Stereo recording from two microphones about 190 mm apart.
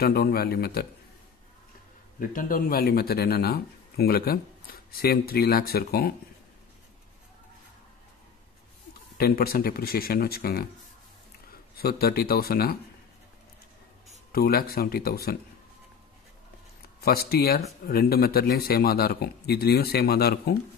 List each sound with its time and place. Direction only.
0.0 s speech: 55° left (ahead or behind)
2.1 s speech: 45° left (ahead or behind)
9.2 s speech: 50° left (ahead or behind)
11.7 s speech: 55° left (ahead or behind)
14.3 s speech: 50° left (ahead or behind)
17.0 s speech: 55° left (ahead or behind)